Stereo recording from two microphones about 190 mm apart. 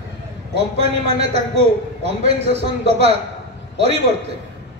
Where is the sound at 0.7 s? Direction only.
35° right (ahead or behind).